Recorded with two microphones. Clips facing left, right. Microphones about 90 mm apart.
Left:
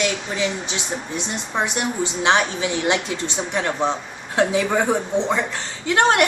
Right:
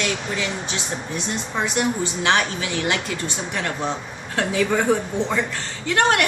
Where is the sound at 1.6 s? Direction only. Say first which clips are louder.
Even; 20° left (ahead or behind).